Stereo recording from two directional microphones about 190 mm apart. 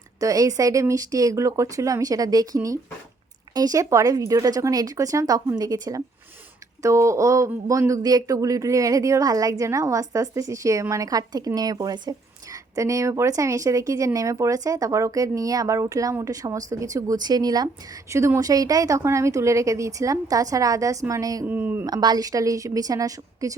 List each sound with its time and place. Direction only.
0.2 s speech: 20° right (ahead or behind)
21.8 s speech: 20° right (ahead or behind)